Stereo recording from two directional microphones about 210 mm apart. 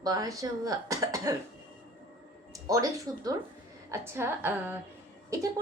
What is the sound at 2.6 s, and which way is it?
Speech, 15° right (ahead or behind).